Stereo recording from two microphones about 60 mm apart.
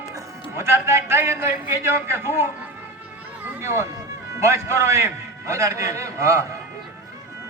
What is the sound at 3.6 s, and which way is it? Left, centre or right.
A man's voice, right.